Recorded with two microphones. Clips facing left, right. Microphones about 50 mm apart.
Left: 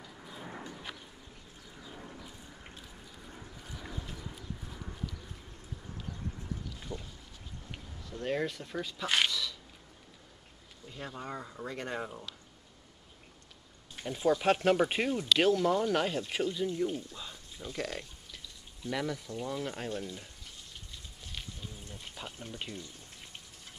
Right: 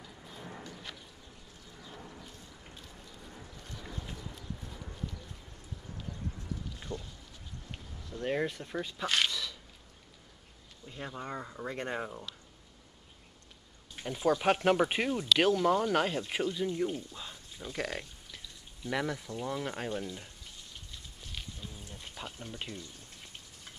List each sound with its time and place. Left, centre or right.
0.3 s a sound: centre
4.2 s horse: centre
6.9 s speech: centre
8.2 s speech: centre
9.0 s speech: centre
9.3 s a sound: centre
10.9 s speech: centre
14.0 s speech: centre
22.2 s speech: centre
22.7 s speech: left